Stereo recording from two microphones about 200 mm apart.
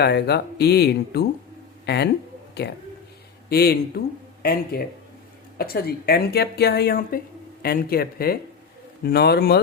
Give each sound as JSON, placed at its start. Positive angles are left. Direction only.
{"t": 0.0, "sound": "a woman's voice", "side_deg": 55}